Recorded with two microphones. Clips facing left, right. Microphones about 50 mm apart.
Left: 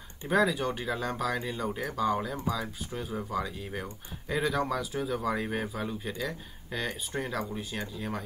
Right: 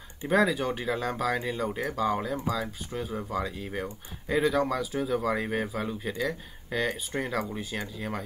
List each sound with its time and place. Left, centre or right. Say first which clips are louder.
0.3 s speech: right 2 dB; centre